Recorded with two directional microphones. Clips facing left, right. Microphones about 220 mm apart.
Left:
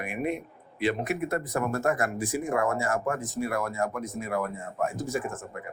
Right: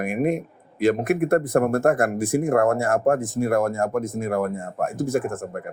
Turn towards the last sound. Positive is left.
turn(degrees=-55)  # may be behind; listen again after turning